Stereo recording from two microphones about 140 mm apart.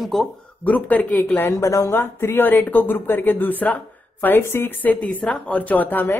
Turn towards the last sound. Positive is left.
turn(degrees=15)  # may be behind; listen again after turning